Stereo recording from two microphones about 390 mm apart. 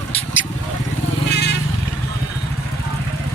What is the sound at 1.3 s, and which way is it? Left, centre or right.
Vehicle, left.